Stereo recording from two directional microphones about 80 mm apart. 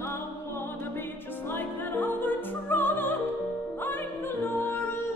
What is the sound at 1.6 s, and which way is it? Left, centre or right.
Music, left.